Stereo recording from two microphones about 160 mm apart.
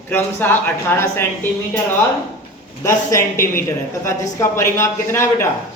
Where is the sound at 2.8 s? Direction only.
15° left (ahead or behind).